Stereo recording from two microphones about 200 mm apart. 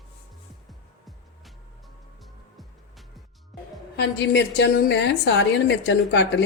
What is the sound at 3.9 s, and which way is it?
A woman's voice, 55° left (ahead or behind).